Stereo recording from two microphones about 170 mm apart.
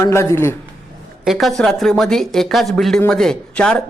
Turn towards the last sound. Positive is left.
turn(degrees=5)  # may be behind; listen again after turning